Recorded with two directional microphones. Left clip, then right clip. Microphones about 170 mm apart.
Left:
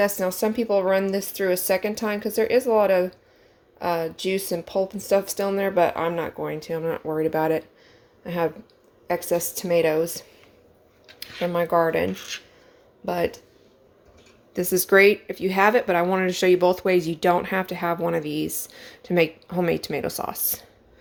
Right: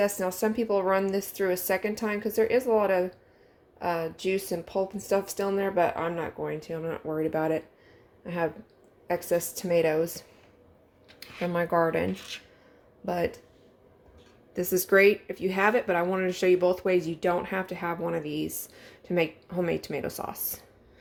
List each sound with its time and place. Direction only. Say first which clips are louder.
0.0 s speech: left 4 dB; 15° left (ahead or behind)
11.5 s speech: left 4 dB; 10° left (ahead or behind)
14.5 s speech: left 5 dB; 15° left (ahead or behind)